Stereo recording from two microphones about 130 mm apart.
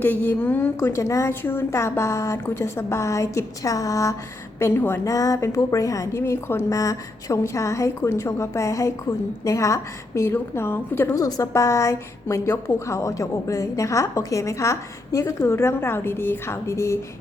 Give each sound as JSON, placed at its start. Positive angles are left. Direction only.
{"t": 0.0, "sound": "a woman's voice", "side_deg": 15}